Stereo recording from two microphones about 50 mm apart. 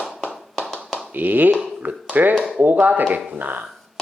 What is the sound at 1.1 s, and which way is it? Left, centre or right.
Speech, right.